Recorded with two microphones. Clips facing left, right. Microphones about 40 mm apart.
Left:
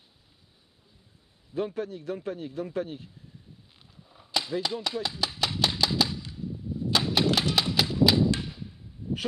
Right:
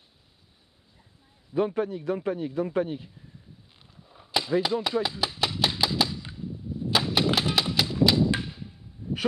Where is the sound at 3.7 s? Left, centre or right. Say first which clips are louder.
Right 2 dB; centre.